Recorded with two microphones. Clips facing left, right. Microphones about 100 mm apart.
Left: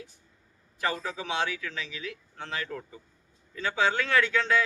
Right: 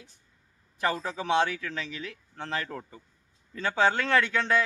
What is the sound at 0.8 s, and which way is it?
Speech, 35° right (ahead or behind).